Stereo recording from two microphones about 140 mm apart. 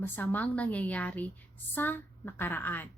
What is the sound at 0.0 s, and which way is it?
A woman's voice, 15° left (ahead or behind).